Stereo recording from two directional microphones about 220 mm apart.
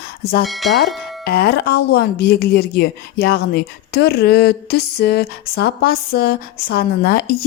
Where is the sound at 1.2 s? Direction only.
45° left (ahead or behind).